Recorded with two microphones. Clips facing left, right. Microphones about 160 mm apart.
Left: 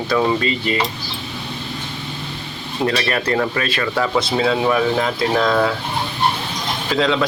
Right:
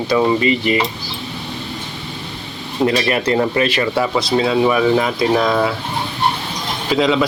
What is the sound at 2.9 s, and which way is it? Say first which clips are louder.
Speech: right 3 dB; 15° right (ahead or behind).